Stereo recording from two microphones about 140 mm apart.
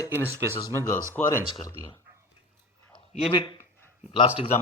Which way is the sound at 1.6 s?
25° left (ahead or behind).